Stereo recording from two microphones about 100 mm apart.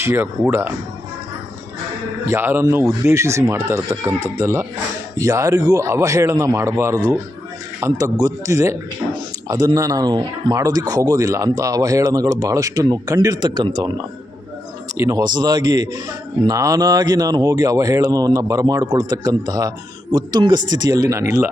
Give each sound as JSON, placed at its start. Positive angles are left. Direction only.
{"t": 0.0, "sound": "speech", "side_deg": -25}
{"t": 2.2, "sound": "speech", "side_deg": -25}
{"t": 14.9, "sound": "speech", "side_deg": -35}